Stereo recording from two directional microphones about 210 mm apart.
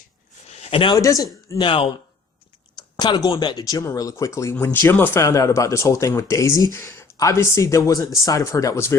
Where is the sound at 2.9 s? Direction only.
20° left (ahead or behind).